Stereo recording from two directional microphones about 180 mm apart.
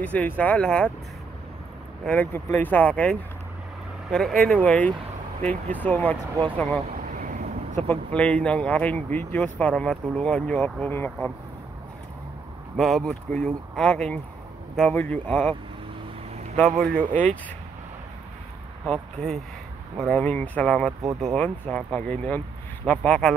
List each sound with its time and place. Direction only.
0.0 s speech: 10° left (ahead or behind)
2.0 s speech: 10° left (ahead or behind)
6.3 s speech: 25° right (ahead or behind)
6.9 s vehicle: 45° right (ahead or behind)
7.9 s speech: 5° left (ahead or behind)
12.7 s speech: centre (ahead or behind)
16.5 s speech: 5° left (ahead or behind)
18.9 s speech: 5° left (ahead or behind)